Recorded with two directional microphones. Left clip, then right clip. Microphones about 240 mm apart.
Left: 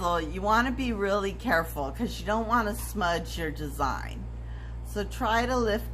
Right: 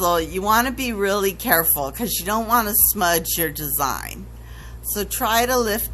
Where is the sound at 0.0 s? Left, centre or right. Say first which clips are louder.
Right 8 dB; right.